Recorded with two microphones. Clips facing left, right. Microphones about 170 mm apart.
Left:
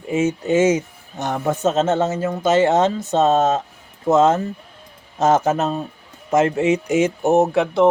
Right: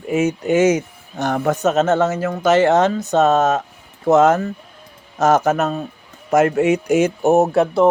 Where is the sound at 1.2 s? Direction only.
75° right (ahead or behind).